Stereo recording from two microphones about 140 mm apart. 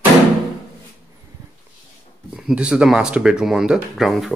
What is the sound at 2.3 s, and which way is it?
Speech, 5° right (ahead or behind).